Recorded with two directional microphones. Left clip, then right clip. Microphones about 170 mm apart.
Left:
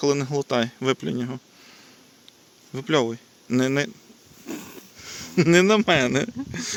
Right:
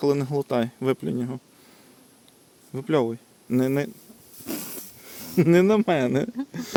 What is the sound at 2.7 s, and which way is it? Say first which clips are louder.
Speech: left 1 dB; 10° right (ahead or behind).